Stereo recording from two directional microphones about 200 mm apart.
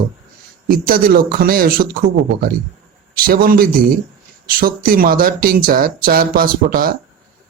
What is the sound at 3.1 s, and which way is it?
A man's voice, 45° right (ahead or behind).